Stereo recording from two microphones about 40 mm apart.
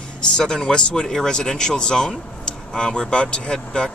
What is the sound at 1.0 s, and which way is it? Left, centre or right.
Speech, centre.